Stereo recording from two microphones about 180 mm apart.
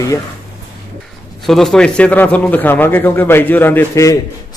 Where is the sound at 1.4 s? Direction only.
Centre (ahead or behind).